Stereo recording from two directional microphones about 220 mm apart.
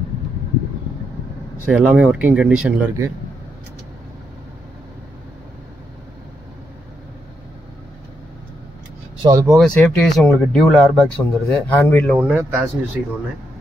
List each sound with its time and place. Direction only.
1.7 s speech: 5° right (ahead or behind)
9.2 s speech: 15° right (ahead or behind)
9.8 s speech: 5° left (ahead or behind)
12.2 s speech: 10° right (ahead or behind)